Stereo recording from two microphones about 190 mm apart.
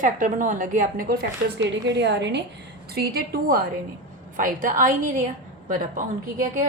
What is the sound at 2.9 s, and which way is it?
A woman's voice, 55° right (ahead or behind).